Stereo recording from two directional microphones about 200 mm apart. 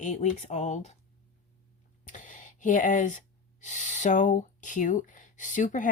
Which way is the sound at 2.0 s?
40° left (ahead or behind).